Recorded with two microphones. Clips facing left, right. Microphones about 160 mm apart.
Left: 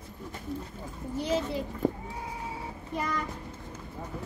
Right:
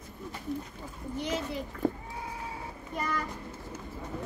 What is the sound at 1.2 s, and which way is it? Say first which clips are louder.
Speech: left 4 dB; 30° left (ahead or behind).